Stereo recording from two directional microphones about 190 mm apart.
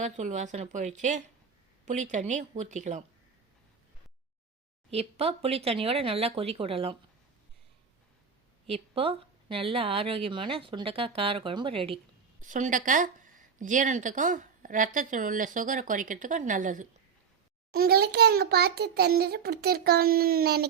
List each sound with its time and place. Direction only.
0.0 s speech: 40° right (ahead or behind)
4.9 s speech: 30° right (ahead or behind)
8.6 s speech: 30° right (ahead or behind)
12.4 s speech: 40° right (ahead or behind)
17.7 s a child's voice: 55° right (ahead or behind)